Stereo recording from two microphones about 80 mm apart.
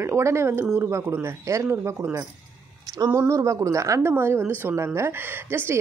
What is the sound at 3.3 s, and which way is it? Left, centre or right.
A woman's voice, right.